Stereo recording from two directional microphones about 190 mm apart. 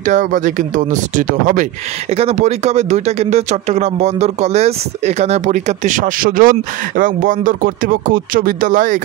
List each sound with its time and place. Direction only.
0.0 s speech: 40° right (ahead or behind)